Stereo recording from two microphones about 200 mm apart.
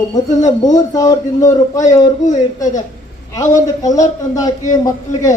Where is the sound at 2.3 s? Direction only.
40° left (ahead or behind).